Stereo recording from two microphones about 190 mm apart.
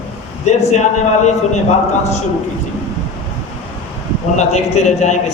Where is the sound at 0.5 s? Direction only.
35° left (ahead or behind).